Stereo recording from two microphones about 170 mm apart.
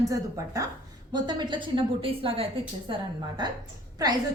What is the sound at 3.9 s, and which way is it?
Speech, 20° right (ahead or behind).